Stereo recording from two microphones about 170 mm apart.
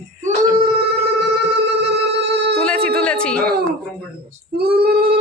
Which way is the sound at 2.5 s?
5° left (ahead or behind).